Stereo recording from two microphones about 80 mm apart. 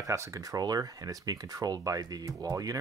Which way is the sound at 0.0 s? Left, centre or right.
Right.